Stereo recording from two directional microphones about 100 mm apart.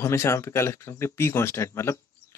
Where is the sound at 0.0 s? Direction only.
30° left (ahead or behind).